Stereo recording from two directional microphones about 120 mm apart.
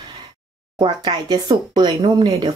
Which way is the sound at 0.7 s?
40° right (ahead or behind).